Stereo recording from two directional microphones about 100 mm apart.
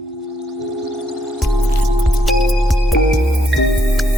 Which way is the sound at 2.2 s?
Centre (ahead or behind).